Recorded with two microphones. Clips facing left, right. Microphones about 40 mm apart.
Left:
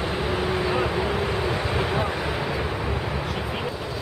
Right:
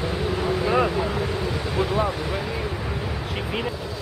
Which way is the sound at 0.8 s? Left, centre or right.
Centre.